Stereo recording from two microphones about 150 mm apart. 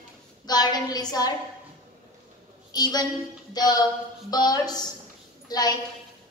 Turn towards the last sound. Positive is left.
turn(degrees=25)  # may be behind; listen again after turning